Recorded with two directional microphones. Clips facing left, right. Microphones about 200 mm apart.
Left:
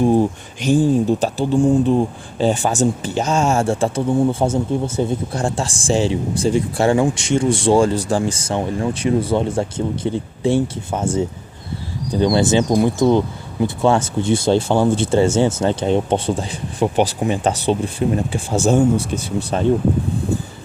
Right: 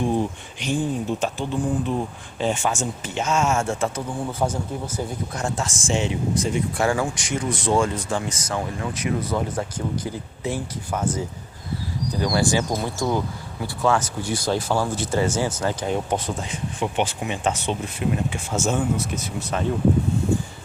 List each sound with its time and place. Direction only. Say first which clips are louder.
0.0 s speech: left 8 dB; 40° left (ahead or behind)